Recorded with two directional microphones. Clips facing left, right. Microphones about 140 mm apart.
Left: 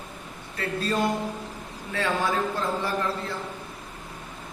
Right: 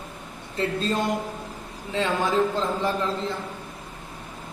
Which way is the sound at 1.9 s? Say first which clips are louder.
Right 2 dB; 20° right (ahead or behind).